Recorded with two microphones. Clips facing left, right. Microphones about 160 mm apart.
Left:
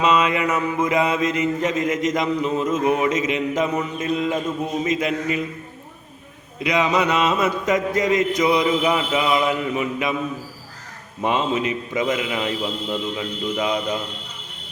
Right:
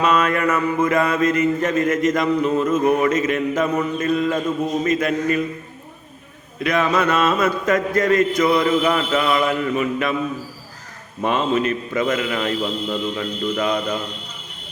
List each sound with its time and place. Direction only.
0.0 s mantra: 15° left (ahead or behind)
3.2 s a sound: 55° right (ahead or behind)
3.5 s mantra: 15° left (ahead or behind)
6.6 s mantra: 15° left (ahead or behind)
11.2 s mantra: 15° left (ahead or behind)